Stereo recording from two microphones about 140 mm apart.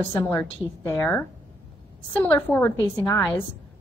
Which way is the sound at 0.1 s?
15° left (ahead or behind).